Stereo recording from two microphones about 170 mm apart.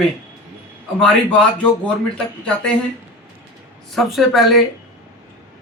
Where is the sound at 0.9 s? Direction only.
5° left (ahead or behind).